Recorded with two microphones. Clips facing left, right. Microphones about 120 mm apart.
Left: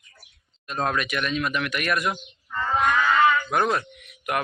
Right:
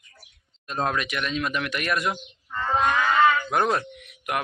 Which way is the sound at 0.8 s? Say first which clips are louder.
Left 2 dB; 20° right (ahead or behind).